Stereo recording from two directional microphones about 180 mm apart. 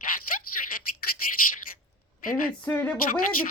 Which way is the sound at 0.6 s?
45° left (ahead or behind).